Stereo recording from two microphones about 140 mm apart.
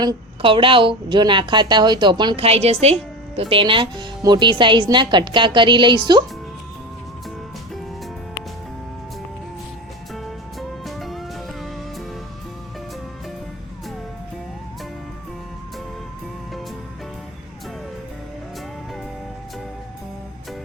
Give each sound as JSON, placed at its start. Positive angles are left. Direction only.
{"t": 0.0, "sound": "a woman's voice", "side_deg": -35}
{"t": 10.2, "sound": "music", "side_deg": 0}